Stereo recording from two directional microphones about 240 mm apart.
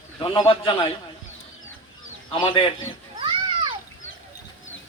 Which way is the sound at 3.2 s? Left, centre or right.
Right.